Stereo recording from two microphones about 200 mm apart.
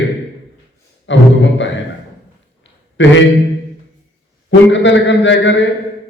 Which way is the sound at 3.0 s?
65° left (ahead or behind).